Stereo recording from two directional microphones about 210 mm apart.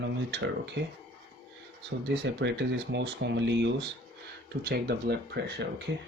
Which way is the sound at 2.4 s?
55° right (ahead or behind).